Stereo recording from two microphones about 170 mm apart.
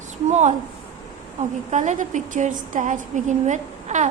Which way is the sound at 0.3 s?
40° right (ahead or behind).